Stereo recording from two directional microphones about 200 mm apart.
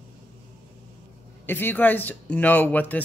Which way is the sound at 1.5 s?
10° left (ahead or behind).